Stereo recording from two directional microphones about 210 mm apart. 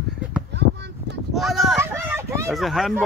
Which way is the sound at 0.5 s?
55° right (ahead or behind).